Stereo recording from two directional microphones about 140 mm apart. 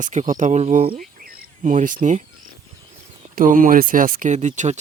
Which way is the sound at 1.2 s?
70° right (ahead or behind).